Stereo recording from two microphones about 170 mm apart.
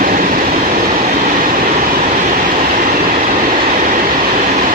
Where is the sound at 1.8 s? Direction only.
55° right (ahead or behind).